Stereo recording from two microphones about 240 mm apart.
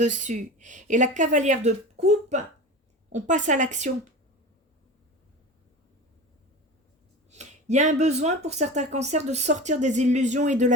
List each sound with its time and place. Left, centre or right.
0.0 s speech: right
7.3 s speech: right